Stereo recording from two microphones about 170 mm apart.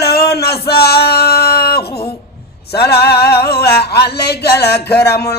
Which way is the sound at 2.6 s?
70° left (ahead or behind).